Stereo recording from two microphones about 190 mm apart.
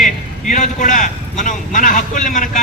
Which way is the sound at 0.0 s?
40° left (ahead or behind).